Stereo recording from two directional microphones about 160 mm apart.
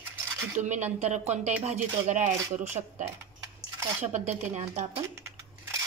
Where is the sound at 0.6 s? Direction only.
45° right (ahead or behind).